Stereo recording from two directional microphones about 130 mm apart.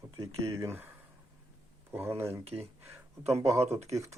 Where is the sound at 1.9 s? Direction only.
20° right (ahead or behind).